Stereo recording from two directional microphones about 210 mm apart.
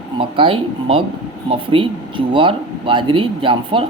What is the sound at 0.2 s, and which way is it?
Speech, 25° right (ahead or behind).